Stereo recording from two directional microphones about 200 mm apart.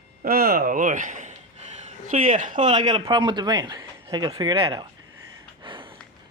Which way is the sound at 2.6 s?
20° right (ahead or behind).